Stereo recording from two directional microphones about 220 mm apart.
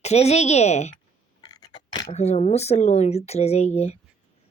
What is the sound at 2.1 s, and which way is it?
Speech, 30° left (ahead or behind).